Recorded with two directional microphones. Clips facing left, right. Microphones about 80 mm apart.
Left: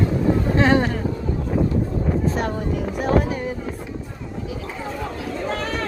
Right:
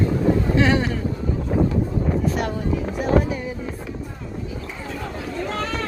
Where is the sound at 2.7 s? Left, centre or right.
Left.